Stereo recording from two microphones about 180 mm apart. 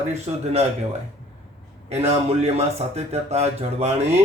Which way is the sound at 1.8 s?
35° right (ahead or behind).